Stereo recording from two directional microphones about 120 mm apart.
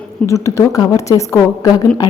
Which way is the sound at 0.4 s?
25° left (ahead or behind).